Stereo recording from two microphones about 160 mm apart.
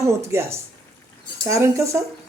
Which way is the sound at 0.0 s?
20° right (ahead or behind).